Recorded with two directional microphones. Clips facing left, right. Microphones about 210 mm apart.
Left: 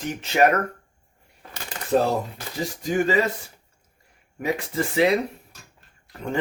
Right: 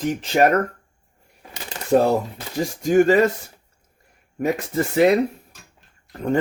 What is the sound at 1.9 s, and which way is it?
Speech, 45° right (ahead or behind).